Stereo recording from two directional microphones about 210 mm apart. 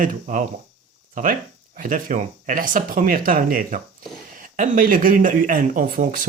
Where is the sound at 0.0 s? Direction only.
40° right (ahead or behind).